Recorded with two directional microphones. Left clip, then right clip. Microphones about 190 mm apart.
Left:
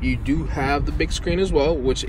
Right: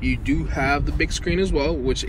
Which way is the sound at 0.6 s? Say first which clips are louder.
Right 1 dB; 25° left (ahead or behind).